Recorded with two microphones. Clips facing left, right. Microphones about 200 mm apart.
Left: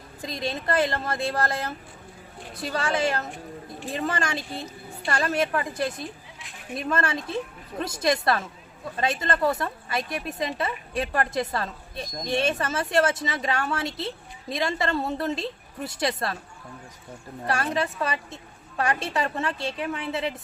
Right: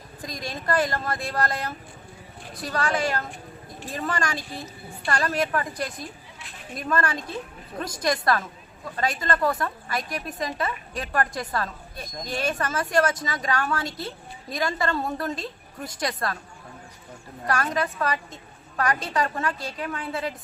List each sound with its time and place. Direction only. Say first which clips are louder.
0.2 s a woman's voice: left 4 dB; 25° left (ahead or behind)
17.4 s a woman's voice: even; 25° left (ahead or behind)